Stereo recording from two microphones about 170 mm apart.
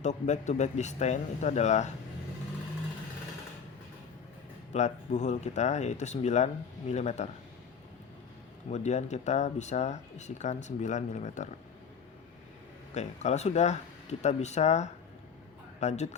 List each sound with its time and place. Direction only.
0.0 s speech: 45° left (ahead or behind)
4.7 s speech: 45° left (ahead or behind)
8.7 s speech: 40° left (ahead or behind)
12.9 s speech: 40° left (ahead or behind)